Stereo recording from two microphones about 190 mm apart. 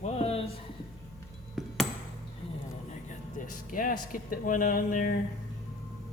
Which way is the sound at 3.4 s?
45° left (ahead or behind).